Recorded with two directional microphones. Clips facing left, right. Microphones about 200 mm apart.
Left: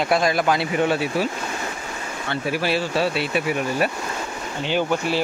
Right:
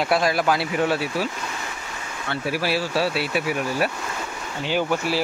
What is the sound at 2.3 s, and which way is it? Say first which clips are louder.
Speech: left 1 dB; 5° right (ahead or behind).